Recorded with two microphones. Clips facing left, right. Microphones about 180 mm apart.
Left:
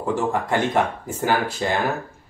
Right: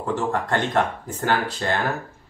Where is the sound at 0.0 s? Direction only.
10° left (ahead or behind).